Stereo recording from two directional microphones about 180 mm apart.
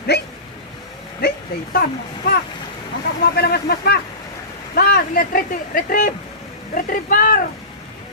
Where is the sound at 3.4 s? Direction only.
60° left (ahead or behind).